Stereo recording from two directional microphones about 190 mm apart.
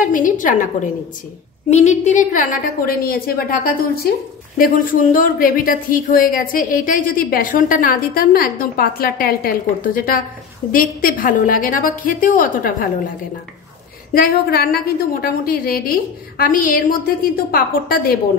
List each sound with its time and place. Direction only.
0.0 s a woman's voice: 45° left (ahead or behind)
1.7 s a woman's voice: 35° left (ahead or behind)
2.9 s speech: 50° left (ahead or behind)
14.1 s speech: 55° left (ahead or behind)